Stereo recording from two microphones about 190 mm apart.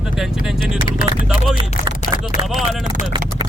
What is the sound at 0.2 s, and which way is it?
Speech, centre (ahead or behind).